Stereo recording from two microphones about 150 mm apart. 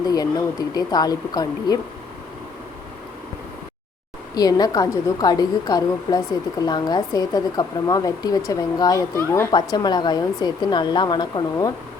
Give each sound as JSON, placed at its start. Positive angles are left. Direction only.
{"t": 0.0, "sound": "a woman's voice", "side_deg": 25}
{"t": 4.4, "sound": "a woman's voice", "side_deg": 25}
{"t": 9.7, "sound": "a woman's voice", "side_deg": 30}